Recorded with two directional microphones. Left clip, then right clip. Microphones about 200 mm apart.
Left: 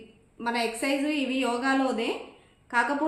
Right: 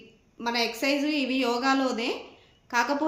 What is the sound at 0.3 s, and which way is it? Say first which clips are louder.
A woman's voice: right 1 dB; 30° right (ahead or behind).